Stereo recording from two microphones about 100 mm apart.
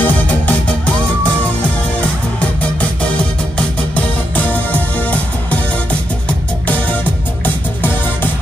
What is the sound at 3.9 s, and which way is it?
Music, 15° left (ahead or behind).